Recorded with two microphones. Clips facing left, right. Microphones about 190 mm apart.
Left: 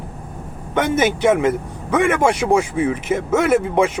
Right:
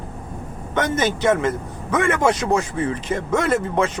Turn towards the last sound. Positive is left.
turn(degrees=10)  # may be behind; listen again after turning